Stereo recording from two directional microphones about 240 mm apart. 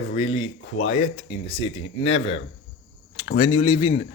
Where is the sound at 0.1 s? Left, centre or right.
Left.